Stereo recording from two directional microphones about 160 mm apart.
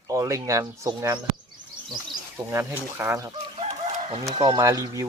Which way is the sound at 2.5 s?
15° right (ahead or behind).